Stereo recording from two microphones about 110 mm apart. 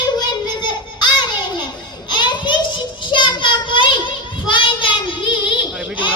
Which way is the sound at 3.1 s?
45° left (ahead or behind).